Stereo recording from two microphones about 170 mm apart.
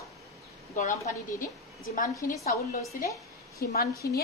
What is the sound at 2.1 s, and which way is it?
Speech, 20° left (ahead or behind).